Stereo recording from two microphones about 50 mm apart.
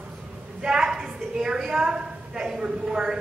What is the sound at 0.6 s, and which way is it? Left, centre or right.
A woman's voice, centre.